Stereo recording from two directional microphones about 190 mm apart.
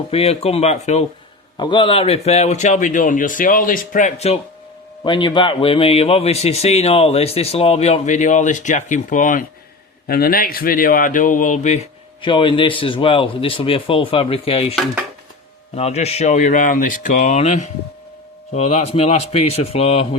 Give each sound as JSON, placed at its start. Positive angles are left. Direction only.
{"t": 0.1, "sound": "speech", "side_deg": 30}
{"t": 1.5, "sound": "speech", "side_deg": 25}
{"t": 5.0, "sound": "speech", "side_deg": 25}
{"t": 12.2, "sound": "a man's voice", "side_deg": 25}